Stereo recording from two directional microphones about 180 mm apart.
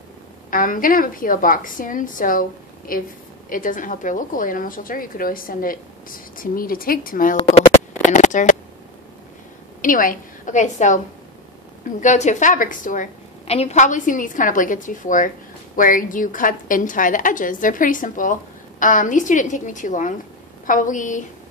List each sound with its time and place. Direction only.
0.5 s a woman's voice: 50° left (ahead or behind)
9.8 s a woman's voice: 50° left (ahead or behind)
12.0 s a woman's voice: 40° left (ahead or behind)